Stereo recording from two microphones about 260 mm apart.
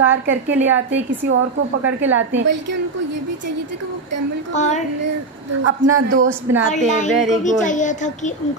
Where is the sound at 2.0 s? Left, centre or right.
Right.